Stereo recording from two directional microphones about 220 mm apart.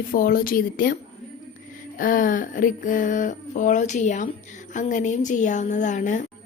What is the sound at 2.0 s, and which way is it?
A woman's voice, 40° left (ahead or behind).